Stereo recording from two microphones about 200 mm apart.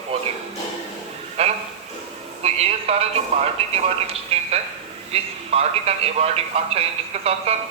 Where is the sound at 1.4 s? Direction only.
30° right (ahead or behind).